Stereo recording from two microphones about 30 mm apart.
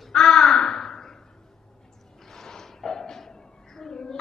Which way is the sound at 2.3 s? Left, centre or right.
Centre.